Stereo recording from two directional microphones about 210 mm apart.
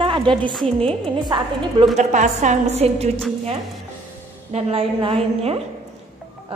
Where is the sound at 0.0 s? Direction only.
25° right (ahead or behind).